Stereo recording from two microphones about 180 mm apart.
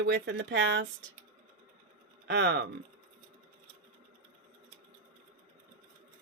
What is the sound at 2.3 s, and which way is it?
Speech, 70° right (ahead or behind).